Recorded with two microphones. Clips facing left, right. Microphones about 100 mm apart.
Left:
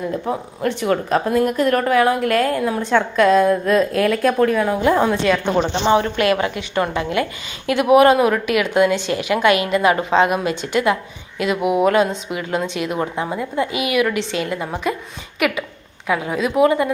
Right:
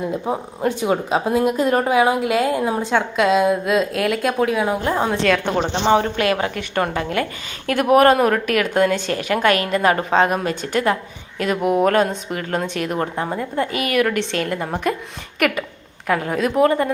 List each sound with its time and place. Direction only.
0.1 s speech: 15° right (ahead or behind)
2.6 s a woman's voice: 25° right (ahead or behind)
2.9 s a woman's voice: 5° right (ahead or behind)
5.5 s speech: 30° right (ahead or behind)
6.5 s a woman's voice: 50° right (ahead or behind)
11.6 s a sound: 10° left (ahead or behind)
11.9 s a woman's voice: 50° right (ahead or behind)